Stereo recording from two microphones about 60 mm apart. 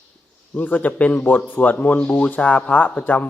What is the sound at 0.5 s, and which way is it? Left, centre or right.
Speech, left.